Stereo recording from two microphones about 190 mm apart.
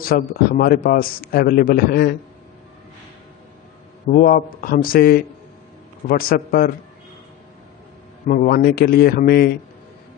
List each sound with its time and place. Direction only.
0.0 s a man's voice: 50° left (ahead or behind)
4.1 s a man's voice: 50° left (ahead or behind)
8.3 s a man's voice: 50° left (ahead or behind)